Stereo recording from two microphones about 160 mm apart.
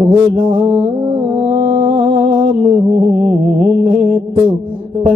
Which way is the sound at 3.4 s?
55° right (ahead or behind).